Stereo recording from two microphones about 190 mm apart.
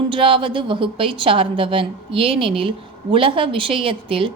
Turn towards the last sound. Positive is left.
turn(degrees=-30)  # may be behind; listen again after turning